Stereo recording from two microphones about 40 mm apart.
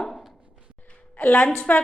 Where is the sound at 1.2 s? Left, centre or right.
Left.